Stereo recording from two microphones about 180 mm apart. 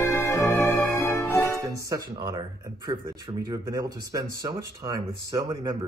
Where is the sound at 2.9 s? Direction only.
25° right (ahead or behind).